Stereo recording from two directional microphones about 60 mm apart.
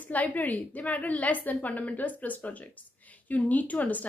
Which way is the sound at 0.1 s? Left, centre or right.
Left.